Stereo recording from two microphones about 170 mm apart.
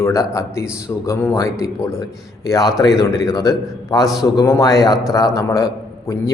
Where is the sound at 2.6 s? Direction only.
Centre (ahead or behind).